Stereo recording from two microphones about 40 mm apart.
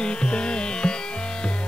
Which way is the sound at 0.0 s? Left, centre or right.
Left.